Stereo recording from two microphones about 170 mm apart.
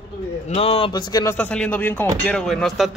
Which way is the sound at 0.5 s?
35° left (ahead or behind).